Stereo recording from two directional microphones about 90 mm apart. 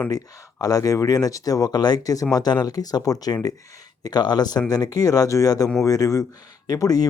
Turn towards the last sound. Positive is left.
turn(degrees=45)  # may be behind; listen again after turning